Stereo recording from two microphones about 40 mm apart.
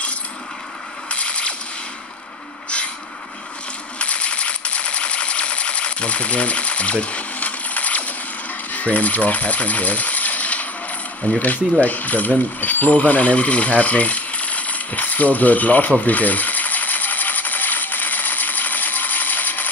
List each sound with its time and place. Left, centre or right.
1.1 s mechanisms: left
4.0 s coin: left
8.7 s speech: left
11.3 s ratchet: left
16.1 s sewing machine: left